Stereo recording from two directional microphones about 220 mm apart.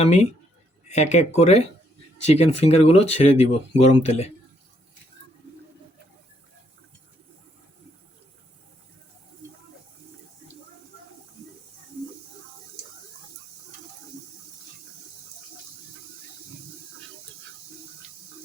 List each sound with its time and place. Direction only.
0.0 s speech: 30° left (ahead or behind)